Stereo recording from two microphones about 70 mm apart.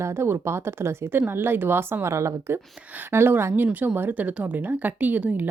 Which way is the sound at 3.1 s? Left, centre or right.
Right.